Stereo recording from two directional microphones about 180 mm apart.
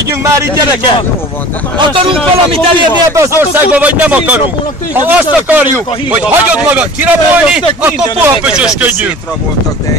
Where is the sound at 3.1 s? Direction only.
15° right (ahead or behind).